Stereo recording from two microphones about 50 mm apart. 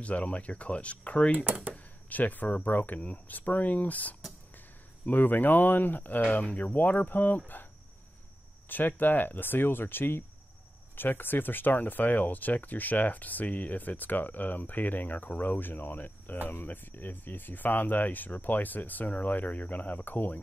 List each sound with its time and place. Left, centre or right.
0.0 s speech: left
1.4 s speech: right
2.0 s speech: left
8.6 s speech: left